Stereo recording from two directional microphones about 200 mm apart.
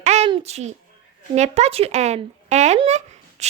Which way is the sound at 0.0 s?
35° right (ahead or behind).